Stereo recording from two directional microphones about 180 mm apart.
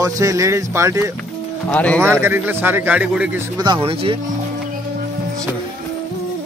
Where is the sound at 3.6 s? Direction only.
30° right (ahead or behind).